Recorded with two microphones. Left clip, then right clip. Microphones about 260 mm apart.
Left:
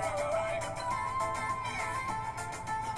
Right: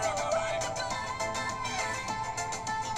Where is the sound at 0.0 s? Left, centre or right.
Right.